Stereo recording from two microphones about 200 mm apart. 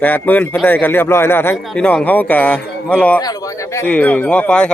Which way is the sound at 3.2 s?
20° left (ahead or behind).